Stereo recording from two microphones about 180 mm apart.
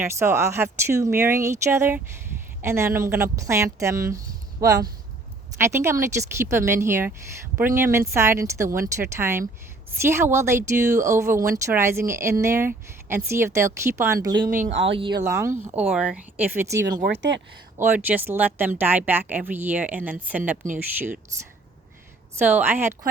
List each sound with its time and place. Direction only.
0.0 s speech: 15° right (ahead or behind)
14.8 s speech: 30° right (ahead or behind)
15.2 s speech: 15° right (ahead or behind)
17.0 s speech: 75° right (ahead or behind)
17.7 s speech: 10° right (ahead or behind)
22.4 s speech: 10° right (ahead or behind)